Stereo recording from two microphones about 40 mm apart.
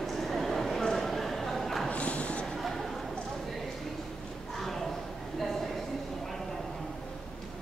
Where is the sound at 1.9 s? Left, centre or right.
Left.